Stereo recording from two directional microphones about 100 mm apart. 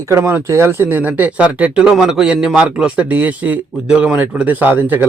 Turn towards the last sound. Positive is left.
turn(degrees=-20)  # may be behind; listen again after turning